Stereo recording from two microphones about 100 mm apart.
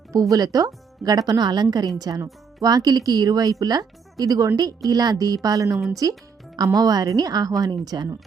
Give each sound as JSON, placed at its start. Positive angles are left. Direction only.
{"t": 0.1, "sound": "a woman's voice", "side_deg": -35}